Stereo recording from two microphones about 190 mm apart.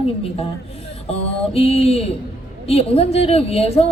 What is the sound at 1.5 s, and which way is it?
A man's voice, 30° left (ahead or behind).